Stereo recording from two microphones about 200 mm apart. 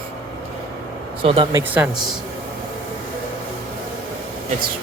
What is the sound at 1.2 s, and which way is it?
Speech, 25° right (ahead or behind).